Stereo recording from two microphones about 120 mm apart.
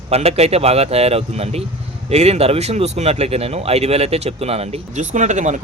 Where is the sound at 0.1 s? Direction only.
60° right (ahead or behind).